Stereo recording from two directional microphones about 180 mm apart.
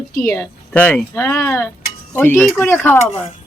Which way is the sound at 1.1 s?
15° left (ahead or behind).